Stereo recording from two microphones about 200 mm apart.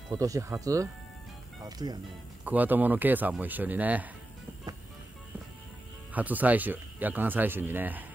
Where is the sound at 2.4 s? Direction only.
10° right (ahead or behind).